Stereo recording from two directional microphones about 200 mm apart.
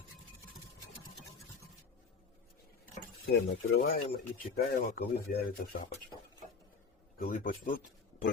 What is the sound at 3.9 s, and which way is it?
Speech, 50° left (ahead or behind).